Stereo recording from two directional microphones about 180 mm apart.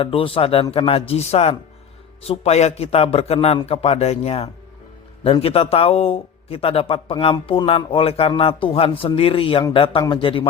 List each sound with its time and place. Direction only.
0.0 s a man's voice: 30° left (ahead or behind)